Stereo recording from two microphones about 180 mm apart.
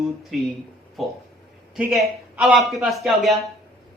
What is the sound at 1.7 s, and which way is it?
A man's voice, 5° right (ahead or behind).